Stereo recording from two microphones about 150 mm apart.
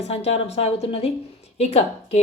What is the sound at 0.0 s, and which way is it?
A woman's voice, 45° left (ahead or behind).